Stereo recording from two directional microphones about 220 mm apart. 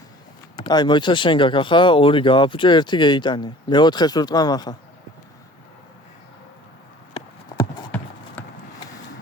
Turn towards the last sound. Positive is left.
turn(degrees=20)  # may be behind; listen again after turning